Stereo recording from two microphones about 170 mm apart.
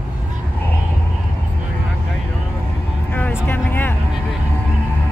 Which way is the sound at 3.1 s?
10° left (ahead or behind).